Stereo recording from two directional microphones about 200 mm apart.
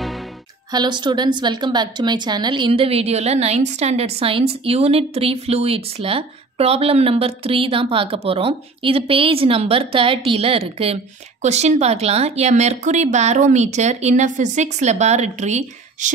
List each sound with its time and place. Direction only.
0.7 s speech: 20° right (ahead or behind)